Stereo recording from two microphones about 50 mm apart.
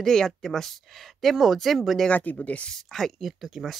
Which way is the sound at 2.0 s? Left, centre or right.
Left.